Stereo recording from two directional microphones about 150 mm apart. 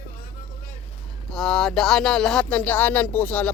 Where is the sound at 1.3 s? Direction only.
5° left (ahead or behind).